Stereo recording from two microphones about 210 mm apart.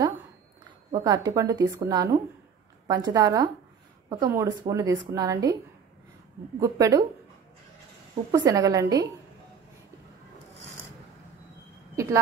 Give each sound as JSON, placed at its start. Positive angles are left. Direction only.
{"t": 0.9, "sound": "a woman's voice", "side_deg": -15}
{"t": 6.6, "sound": "a woman's voice", "side_deg": -15}
{"t": 8.3, "sound": "a woman's voice", "side_deg": -15}
{"t": 11.9, "sound": "speech", "side_deg": -15}